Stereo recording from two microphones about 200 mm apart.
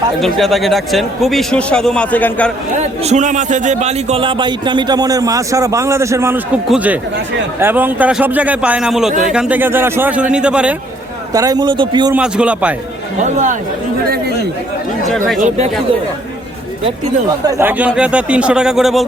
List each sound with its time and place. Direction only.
0.2 s a man's voice: centre (ahead or behind)
2.7 s a man's voice: 35° right (ahead or behind); by 10.8 s 5° right (ahead or behind)
11.3 s a man's voice: 20° right (ahead or behind)
12.1 s a man's voice: 5° right (ahead or behind)
13.1 s speech: 35° right (ahead or behind)
15.4 s speech: 35° right (ahead or behind)
16.8 s a man's voice: 20° right (ahead or behind); by 19.0 s centre (ahead or behind)